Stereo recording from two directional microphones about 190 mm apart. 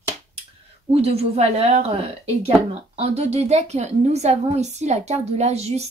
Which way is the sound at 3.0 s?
35° right (ahead or behind).